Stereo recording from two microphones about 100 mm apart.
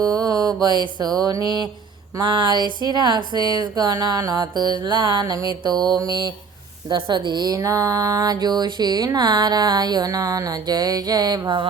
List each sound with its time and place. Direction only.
0.0 s mantra: 40° right (ahead or behind)
2.1 s a woman's voice: 45° right (ahead or behind)
5.2 s a woman's voice: 35° right (ahead or behind)